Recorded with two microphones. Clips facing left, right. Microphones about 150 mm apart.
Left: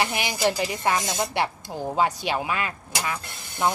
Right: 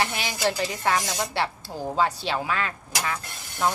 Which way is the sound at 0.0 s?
15° left (ahead or behind).